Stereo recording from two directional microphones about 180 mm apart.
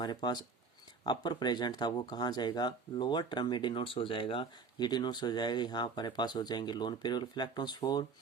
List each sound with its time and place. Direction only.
0.0 s speech: 25° left (ahead or behind)